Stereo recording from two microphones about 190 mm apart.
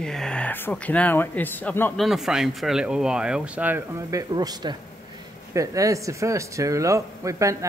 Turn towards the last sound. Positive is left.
turn(degrees=-15)  # may be behind; listen again after turning